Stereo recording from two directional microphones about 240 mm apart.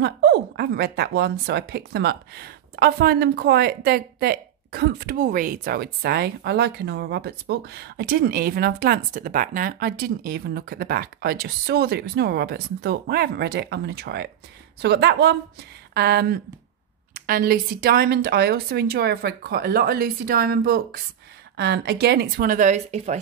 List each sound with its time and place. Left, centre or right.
0.0 s speech: right